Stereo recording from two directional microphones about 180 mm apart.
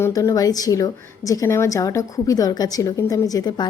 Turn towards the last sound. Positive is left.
turn(degrees=25)  # may be behind; listen again after turning